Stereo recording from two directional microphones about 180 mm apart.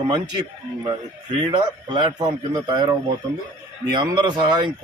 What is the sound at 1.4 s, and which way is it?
A man's voice, 25° right (ahead or behind).